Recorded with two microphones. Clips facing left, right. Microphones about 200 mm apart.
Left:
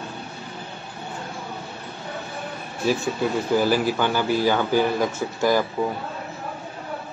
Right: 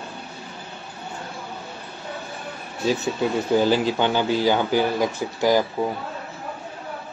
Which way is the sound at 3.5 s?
20° right (ahead or behind).